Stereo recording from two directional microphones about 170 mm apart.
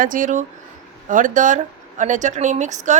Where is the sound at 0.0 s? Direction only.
50° right (ahead or behind).